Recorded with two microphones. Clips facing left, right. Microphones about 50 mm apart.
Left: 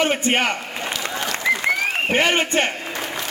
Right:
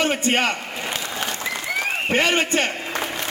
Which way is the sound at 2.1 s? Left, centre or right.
Left.